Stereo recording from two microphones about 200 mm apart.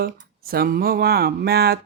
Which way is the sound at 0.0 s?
50° right (ahead or behind).